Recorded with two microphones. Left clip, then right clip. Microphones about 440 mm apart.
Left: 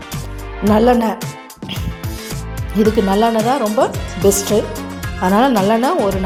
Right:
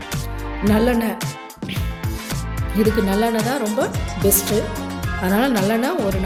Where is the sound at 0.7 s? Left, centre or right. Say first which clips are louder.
Left 7 dB; right.